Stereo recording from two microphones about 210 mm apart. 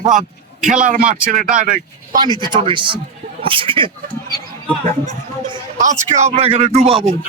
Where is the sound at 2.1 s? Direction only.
20° right (ahead or behind).